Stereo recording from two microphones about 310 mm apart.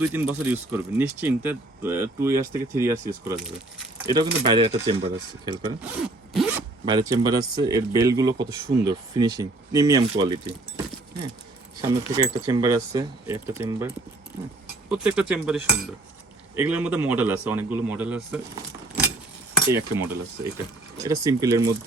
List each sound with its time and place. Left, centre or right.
0.0 s speech: centre
11.8 s speech: centre
20.0 s speech: centre